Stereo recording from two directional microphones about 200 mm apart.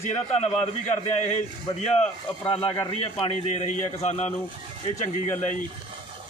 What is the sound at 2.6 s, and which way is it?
A man's voice, 25° left (ahead or behind).